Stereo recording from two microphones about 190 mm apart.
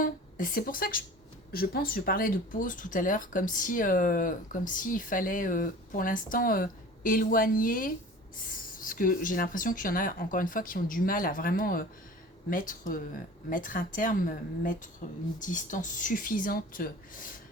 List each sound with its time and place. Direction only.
0.0 s speech: 45° left (ahead or behind)